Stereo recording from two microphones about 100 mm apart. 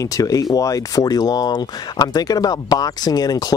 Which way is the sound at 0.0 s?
35° left (ahead or behind).